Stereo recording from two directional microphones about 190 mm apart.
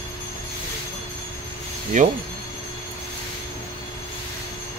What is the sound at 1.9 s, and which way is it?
Speech, 40° right (ahead or behind).